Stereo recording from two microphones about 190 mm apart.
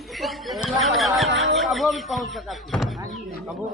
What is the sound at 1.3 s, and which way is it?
Speech, 75° right (ahead or behind).